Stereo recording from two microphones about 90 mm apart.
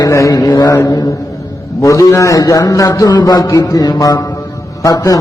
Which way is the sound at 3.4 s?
40° left (ahead or behind).